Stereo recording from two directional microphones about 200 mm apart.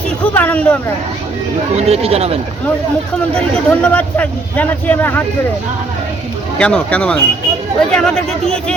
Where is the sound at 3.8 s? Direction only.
5° left (ahead or behind).